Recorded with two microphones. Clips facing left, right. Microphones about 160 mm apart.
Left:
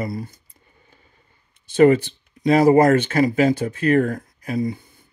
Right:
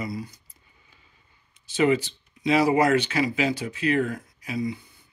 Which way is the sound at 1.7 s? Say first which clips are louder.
Left 8 dB; 55° left (ahead or behind).